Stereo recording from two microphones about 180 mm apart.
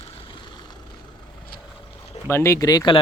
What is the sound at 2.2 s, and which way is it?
Speech, 15° left (ahead or behind).